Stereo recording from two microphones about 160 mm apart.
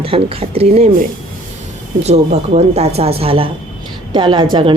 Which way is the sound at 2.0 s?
45° right (ahead or behind).